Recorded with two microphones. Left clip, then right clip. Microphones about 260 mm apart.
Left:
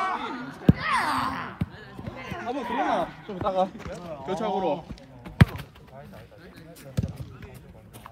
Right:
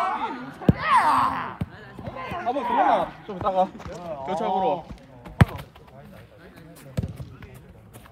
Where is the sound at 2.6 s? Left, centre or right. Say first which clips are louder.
Right 7 dB; right.